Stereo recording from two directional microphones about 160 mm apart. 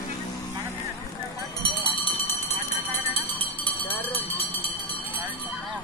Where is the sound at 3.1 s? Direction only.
35° left (ahead or behind).